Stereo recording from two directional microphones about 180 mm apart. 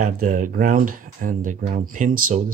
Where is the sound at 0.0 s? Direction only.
45° right (ahead or behind).